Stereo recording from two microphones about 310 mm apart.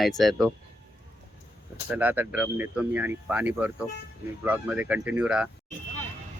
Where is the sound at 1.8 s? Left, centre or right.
Centre.